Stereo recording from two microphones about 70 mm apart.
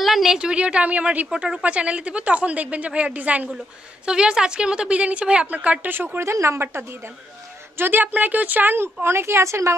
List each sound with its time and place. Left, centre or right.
0.0 s a woman's voice: centre; by 1.2 s right
1.3 s a woman's voice: centre; by 6.0 s right
6.1 s a woman's voice: right
7.7 s a woman's voice: right